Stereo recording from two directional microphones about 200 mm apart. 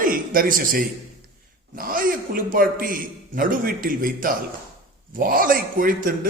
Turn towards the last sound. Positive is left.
turn(degrees=-45)  # may be behind; listen again after turning